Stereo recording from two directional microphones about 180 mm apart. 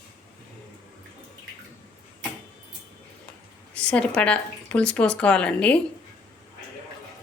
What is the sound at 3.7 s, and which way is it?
Speech, 5° left (ahead or behind).